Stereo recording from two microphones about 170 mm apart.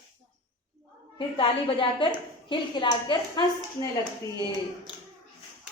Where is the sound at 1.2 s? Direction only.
30° left (ahead or behind).